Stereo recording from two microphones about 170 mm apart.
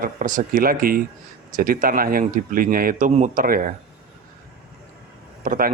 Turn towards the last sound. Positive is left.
turn(degrees=-55)  # may be behind; listen again after turning